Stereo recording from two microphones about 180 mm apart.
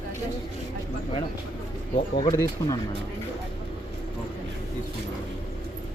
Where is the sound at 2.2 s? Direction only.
20° left (ahead or behind).